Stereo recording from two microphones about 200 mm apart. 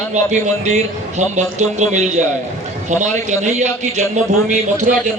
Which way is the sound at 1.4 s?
35° right (ahead or behind).